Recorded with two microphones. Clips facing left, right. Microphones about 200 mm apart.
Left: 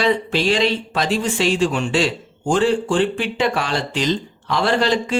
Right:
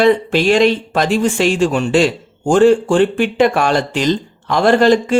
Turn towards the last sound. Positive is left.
turn(degrees=-50)  # may be behind; listen again after turning